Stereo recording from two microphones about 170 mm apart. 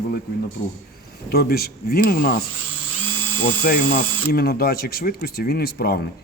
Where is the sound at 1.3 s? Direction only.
65° left (ahead or behind).